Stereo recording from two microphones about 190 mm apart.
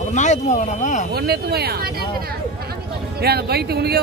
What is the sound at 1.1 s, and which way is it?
Speech, 55° right (ahead or behind).